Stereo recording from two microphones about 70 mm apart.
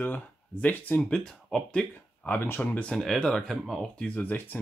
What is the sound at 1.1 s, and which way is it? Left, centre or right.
Speech, centre.